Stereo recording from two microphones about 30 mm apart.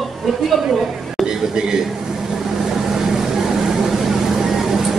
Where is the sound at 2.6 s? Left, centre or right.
Centre.